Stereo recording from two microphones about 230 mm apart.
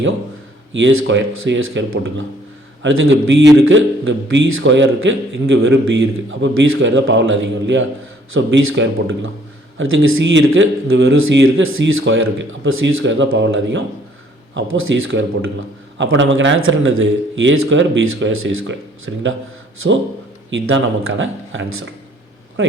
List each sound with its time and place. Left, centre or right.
0.7 s a man's voice: right
20.5 s a man's voice: right